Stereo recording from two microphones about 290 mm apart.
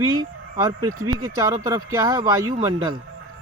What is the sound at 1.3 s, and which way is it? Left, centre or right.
Speech, centre.